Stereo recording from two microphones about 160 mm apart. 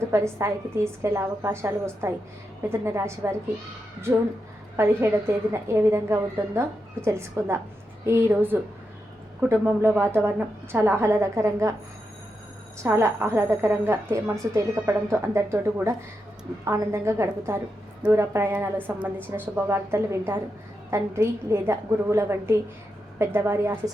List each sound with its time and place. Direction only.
0.1 s a woman's voice: 15° right (ahead or behind)
4.8 s a woman's voice: 15° right (ahead or behind)
12.8 s a woman's voice: 15° right (ahead or behind)